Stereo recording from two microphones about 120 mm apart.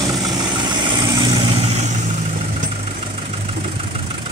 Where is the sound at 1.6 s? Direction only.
60° right (ahead or behind).